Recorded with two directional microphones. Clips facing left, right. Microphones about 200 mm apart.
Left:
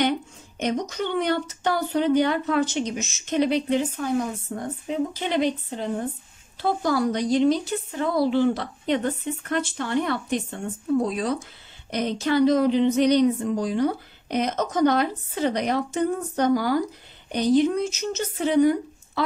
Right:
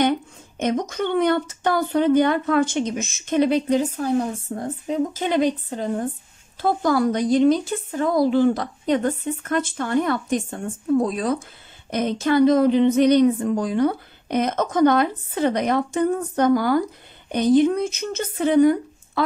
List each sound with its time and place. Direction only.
0.6 s speech: 50° right (ahead or behind); by 4.9 s 35° right (ahead or behind)
5.1 s speech: 45° right (ahead or behind)